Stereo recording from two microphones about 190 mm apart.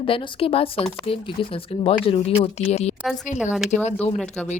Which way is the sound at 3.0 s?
5° right (ahead or behind).